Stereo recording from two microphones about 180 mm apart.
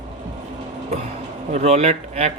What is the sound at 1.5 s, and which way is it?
Speech, 40° right (ahead or behind).